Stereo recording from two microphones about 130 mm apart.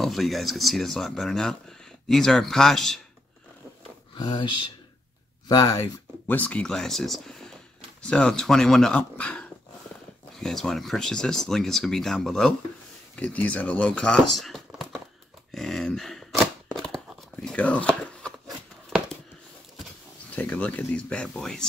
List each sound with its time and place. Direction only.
0.0 s speech: centre (ahead or behind)
4.2 s speech: 35° left (ahead or behind)
6.2 s speech: 10° left (ahead or behind)
15.5 s a sound: 5° left (ahead or behind)
18.9 s a sound: 5° right (ahead or behind)
20.3 s speech: 10° left (ahead or behind)